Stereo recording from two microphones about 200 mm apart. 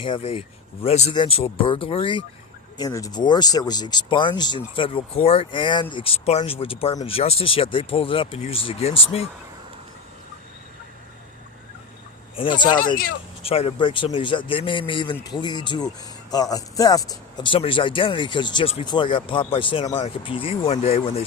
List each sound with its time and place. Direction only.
0.0 s speech: 30° left (ahead or behind)
12.4 s speech: 25° left (ahead or behind)